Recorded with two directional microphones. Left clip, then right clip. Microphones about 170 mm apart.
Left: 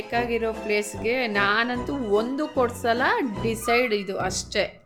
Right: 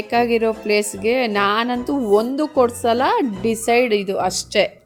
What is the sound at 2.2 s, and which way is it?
A woman's voice, 25° right (ahead or behind).